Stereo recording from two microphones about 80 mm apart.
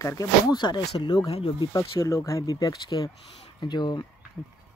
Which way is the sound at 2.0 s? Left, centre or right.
Left.